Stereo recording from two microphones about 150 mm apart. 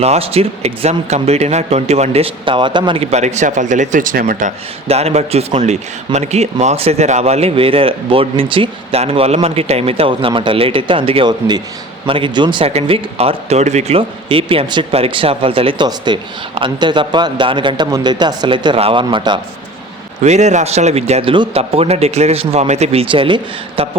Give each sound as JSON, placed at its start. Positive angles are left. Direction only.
{"t": 0.0, "sound": "speech", "side_deg": -40}
{"t": 20.2, "sound": "speech", "side_deg": -50}